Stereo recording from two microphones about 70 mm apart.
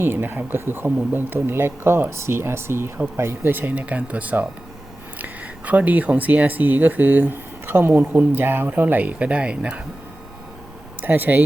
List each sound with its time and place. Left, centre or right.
0.0 s speech: right; by 9.8 s centre
11.0 s speech: right